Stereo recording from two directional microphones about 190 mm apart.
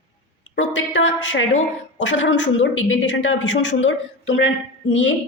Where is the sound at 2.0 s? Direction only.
75° left (ahead or behind).